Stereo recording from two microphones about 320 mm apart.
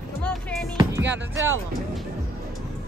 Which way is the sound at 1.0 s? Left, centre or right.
Right.